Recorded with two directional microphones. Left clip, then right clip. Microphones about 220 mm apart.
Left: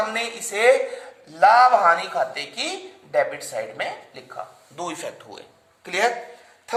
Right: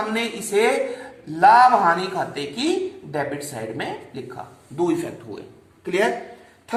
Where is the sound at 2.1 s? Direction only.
20° left (ahead or behind).